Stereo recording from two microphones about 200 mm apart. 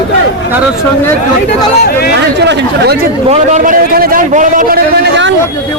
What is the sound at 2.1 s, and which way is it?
Speech, 55° right (ahead or behind).